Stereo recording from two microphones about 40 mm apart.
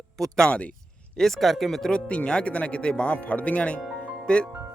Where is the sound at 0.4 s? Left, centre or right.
Left.